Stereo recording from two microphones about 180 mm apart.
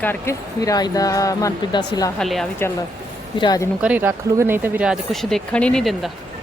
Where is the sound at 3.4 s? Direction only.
25° left (ahead or behind).